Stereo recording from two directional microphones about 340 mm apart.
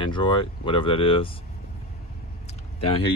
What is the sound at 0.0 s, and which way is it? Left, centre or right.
Speech, centre.